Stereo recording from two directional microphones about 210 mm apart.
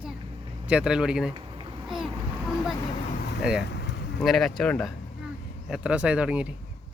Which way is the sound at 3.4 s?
5° right (ahead or behind).